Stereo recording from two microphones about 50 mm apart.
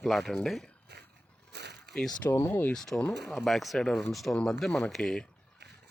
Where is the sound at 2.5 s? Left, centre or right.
Left.